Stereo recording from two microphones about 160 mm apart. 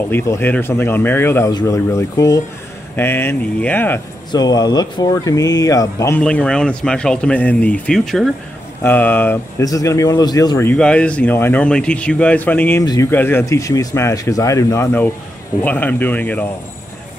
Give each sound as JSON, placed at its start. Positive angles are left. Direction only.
{"t": 0.1, "sound": "speech", "side_deg": 15}
{"t": 4.3, "sound": "speech", "side_deg": 25}
{"t": 6.2, "sound": "speech", "side_deg": 5}
{"t": 10.7, "sound": "speech", "side_deg": 5}
{"t": 12.8, "sound": "speech", "side_deg": 25}
{"t": 13.1, "sound": "speech", "side_deg": 15}